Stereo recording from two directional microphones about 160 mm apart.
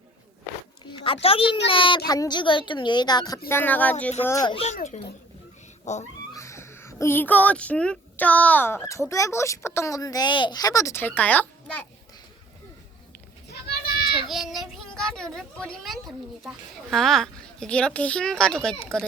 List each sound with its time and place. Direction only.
0.9 s a child's voice: 30° left (ahead or behind)
3.5 s speech: 10° left (ahead or behind)
4.4 s speech: 35° left (ahead or behind)
4.7 s speech: 45° left (ahead or behind)
6.3 s speech: 20° left (ahead or behind)
13.5 s children playing: 75° left (ahead or behind)
14.3 s speech: centre (ahead or behind)